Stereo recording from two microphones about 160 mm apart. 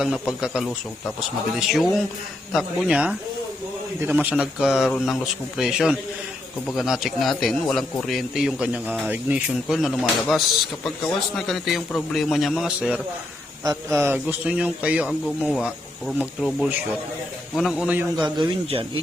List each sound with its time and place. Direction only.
0.0 s speech: 5° right (ahead or behind)
18.2 s speech: 30° right (ahead or behind)